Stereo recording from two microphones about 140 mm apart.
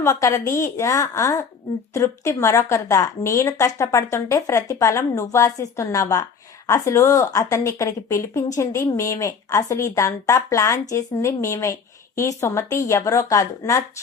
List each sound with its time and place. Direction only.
0.0 s speech: 20° left (ahead or behind)